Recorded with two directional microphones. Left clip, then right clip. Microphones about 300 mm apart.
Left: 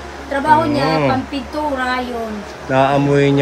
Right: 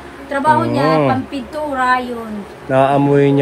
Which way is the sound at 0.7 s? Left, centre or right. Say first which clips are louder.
Right 2 dB; right.